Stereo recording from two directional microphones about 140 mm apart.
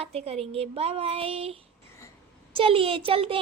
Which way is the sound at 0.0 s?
45° right (ahead or behind).